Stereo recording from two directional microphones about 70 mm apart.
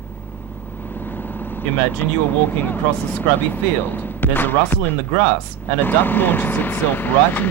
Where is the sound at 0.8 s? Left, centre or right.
Left.